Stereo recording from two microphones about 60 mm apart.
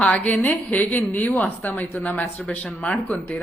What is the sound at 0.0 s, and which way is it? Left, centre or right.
Speech, left.